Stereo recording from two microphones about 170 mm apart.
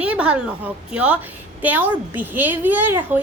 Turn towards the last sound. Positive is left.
turn(degrees=-10)  # may be behind; listen again after turning